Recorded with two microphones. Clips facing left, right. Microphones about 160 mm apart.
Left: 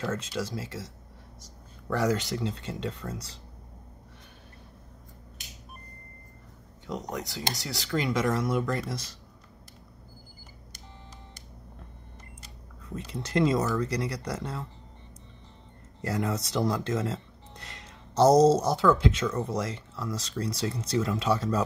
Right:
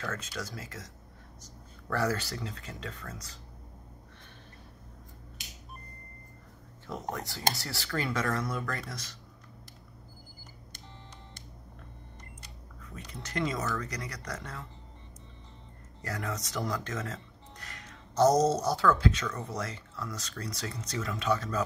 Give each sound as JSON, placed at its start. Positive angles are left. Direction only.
{"t": 0.0, "sound": "speech", "side_deg": 25}
{"t": 1.9, "sound": "speech", "side_deg": 15}
{"t": 6.9, "sound": "speech", "side_deg": 15}
{"t": 12.9, "sound": "speech", "side_deg": 30}
{"t": 16.0, "sound": "speech", "side_deg": 25}